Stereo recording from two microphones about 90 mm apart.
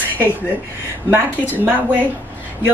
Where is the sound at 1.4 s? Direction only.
20° right (ahead or behind).